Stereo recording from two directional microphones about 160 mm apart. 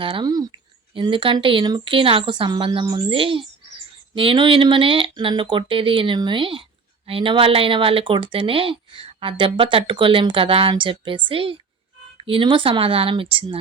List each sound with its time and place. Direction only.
0.0 s a woman's voice: 30° right (ahead or behind)